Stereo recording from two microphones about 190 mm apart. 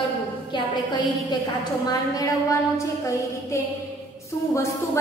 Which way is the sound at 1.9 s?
20° left (ahead or behind).